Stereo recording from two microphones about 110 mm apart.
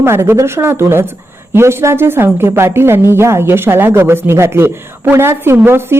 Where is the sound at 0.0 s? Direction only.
25° right (ahead or behind).